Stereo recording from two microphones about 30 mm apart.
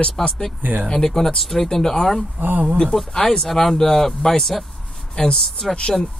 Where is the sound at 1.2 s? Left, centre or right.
Centre.